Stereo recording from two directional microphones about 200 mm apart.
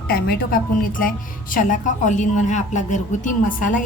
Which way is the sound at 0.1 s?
45° left (ahead or behind).